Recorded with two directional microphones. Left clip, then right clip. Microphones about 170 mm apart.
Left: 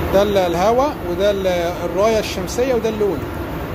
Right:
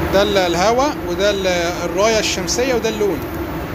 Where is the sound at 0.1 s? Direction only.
5° left (ahead or behind).